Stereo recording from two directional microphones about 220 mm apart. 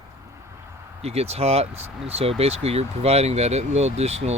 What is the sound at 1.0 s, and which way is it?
Speech, 30° right (ahead or behind).